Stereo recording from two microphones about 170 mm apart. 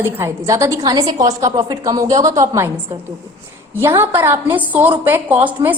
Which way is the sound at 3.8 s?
15° right (ahead or behind).